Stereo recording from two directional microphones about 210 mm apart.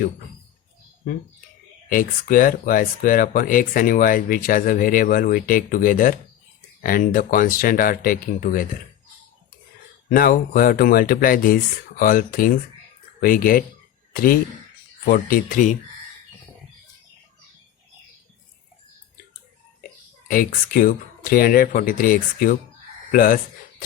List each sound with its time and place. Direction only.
1.9 s speech: 40° left (ahead or behind)
10.1 s speech: 40° left (ahead or behind)
15.0 s speech: 45° left (ahead or behind)
20.2 s speech: 40° left (ahead or behind)